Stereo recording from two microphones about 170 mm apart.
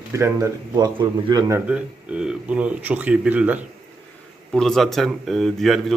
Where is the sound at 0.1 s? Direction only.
15° right (ahead or behind).